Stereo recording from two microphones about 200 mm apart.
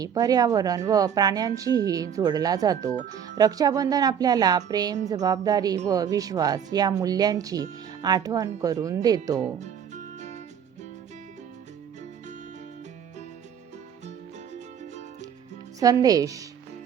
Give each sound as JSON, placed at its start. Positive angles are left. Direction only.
{"t": 0.0, "sound": "speech", "side_deg": -20}
{"t": 9.4, "sound": "music", "side_deg": -35}
{"t": 15.8, "sound": "speech", "side_deg": -20}